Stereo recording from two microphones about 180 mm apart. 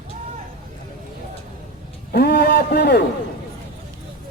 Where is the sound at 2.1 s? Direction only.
65° left (ahead or behind).